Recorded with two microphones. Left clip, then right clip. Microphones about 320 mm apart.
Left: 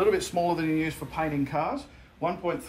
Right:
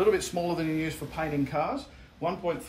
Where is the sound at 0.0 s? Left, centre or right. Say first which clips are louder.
Left 1 dB; centre.